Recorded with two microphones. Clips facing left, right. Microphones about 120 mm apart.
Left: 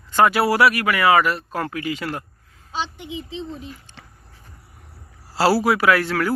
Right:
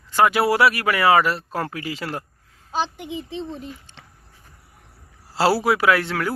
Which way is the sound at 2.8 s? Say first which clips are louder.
Right 2 dB; 45° right (ahead or behind).